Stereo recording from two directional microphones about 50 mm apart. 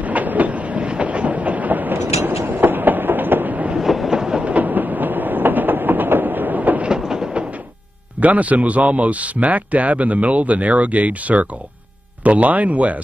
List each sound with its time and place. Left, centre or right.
0.0 s train: right
3.7 s train: centre
4.5 s train: right
6.8 s train: centre
8.2 s a man's voice: right